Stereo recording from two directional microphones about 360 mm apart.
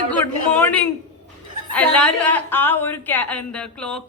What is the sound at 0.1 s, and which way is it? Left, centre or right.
A man's voice, centre.